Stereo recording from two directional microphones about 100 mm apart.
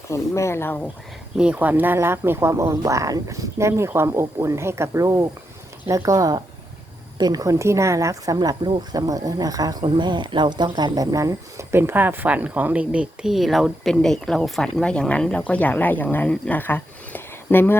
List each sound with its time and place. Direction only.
0.1 s speech: 30° left (ahead or behind)
1.4 s speech: 15° right (ahead or behind); by 9.7 s 40° right (ahead or behind)
9.8 s speech: 55° right (ahead or behind); by 17.7 s 20° left (ahead or behind)